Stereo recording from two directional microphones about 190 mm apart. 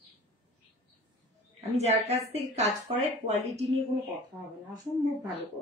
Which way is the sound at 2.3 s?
35° right (ahead or behind).